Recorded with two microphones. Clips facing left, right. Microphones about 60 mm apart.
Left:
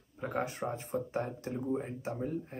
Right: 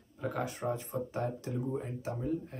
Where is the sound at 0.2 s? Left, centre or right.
Left.